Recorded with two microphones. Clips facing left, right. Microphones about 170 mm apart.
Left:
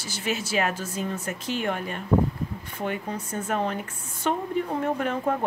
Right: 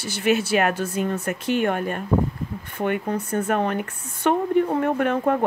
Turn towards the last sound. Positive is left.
turn(degrees=-60)  # may be behind; listen again after turning